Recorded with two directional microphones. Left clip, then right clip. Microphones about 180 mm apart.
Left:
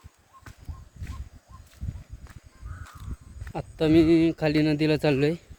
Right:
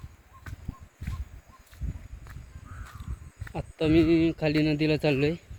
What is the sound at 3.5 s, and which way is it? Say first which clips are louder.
Speech: left 3 dB; 20° left (ahead or behind).